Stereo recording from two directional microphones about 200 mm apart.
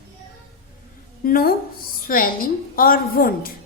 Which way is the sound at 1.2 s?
45° left (ahead or behind).